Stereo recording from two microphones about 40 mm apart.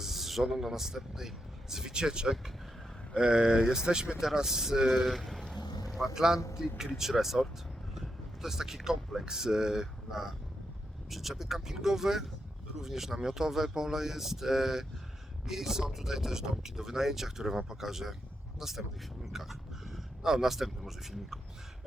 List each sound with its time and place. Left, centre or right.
0.0 s speech: centre
4.9 s boat: centre
6.2 s speech: centre